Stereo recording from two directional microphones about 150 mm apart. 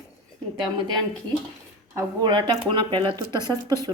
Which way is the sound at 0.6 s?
30° right (ahead or behind).